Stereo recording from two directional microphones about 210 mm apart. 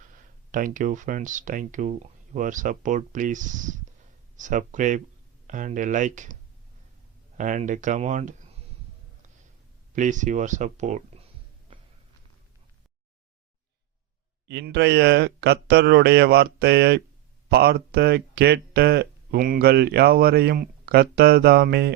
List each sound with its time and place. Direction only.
0.5 s speech: 40° right (ahead or behind)
7.3 s speech: 35° right (ahead or behind)
9.9 s speech: 35° right (ahead or behind)
11.7 s a sound: 25° right (ahead or behind)
14.4 s speech: 55° right (ahead or behind)